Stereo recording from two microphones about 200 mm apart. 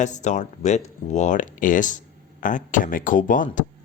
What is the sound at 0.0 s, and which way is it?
Speech, 35° left (ahead or behind).